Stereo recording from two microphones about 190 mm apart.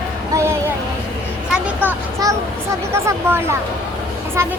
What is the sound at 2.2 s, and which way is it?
Speech, 20° right (ahead or behind).